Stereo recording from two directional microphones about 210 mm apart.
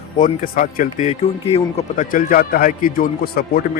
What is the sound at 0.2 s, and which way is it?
A man's voice, 40° left (ahead or behind).